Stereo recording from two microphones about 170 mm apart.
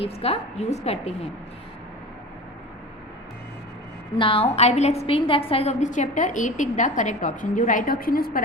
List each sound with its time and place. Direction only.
0.0 s a woman's voice: 35° left (ahead or behind)
4.2 s a woman's voice: 35° left (ahead or behind); by 8.4 s 60° left (ahead or behind)